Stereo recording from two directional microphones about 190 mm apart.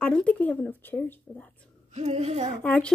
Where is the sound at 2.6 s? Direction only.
5° left (ahead or behind).